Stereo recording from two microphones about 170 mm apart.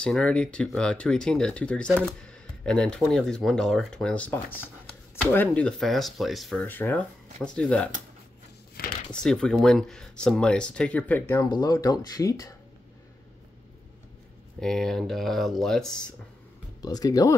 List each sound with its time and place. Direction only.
0.0 s speech: 5° left (ahead or behind)
6.6 s speech: 10° left (ahead or behind)
9.1 s speech: 5° left (ahead or behind); by 12.5 s 20° left (ahead or behind)
14.6 s speech: 5° left (ahead or behind)
16.8 s speech: 20° left (ahead or behind)